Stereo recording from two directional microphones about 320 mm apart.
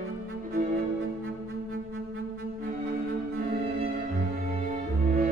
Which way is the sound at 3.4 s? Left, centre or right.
Right.